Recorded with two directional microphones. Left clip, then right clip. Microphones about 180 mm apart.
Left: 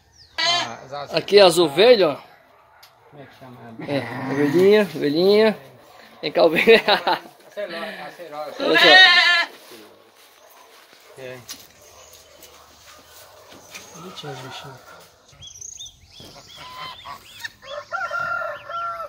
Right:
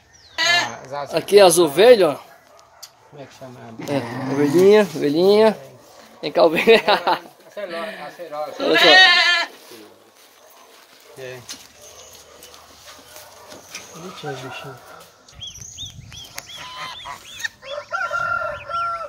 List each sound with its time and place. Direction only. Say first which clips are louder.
1.1 s speech: right 1 dB; centre (ahead or behind)
3.9 s speech: right 1 dB; centre (ahead or behind)
8.7 s speech: even; 10° right (ahead or behind)
16.5 s goose: right 2 dB; 5° right (ahead or behind)
17.6 s chicken: right 1 dB; 35° right (ahead or behind)
18.2 s crowing: right 3 dB; 45° right (ahead or behind)